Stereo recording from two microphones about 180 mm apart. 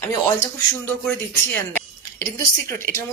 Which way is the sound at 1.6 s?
10° left (ahead or behind).